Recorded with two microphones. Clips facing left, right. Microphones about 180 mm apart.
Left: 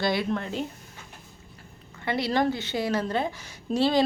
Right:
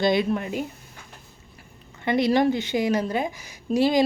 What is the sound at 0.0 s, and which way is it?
Speech, 20° right (ahead or behind).